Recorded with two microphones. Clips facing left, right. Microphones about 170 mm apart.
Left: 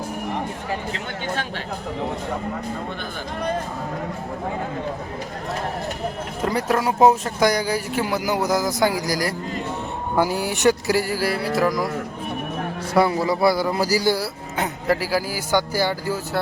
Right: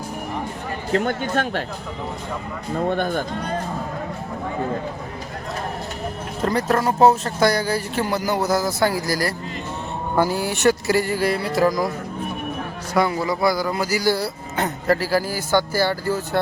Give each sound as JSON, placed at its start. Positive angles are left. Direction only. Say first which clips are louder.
{"t": 0.9, "sound": "speech", "louder": "right 7 dB", "side_deg": -50}
{"t": 2.9, "sound": "speech", "louder": "right 9 dB", "side_deg": -50}
{"t": 6.4, "sound": "speech", "louder": "right 1 dB", "side_deg": 10}
{"t": 12.9, "sound": "a man's voice", "louder": "left 2 dB", "side_deg": 30}
{"t": 14.2, "sound": "speech", "louder": "right 1 dB", "side_deg": 10}